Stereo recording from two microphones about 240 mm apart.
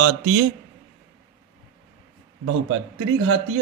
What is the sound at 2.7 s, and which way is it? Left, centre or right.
Speech, right.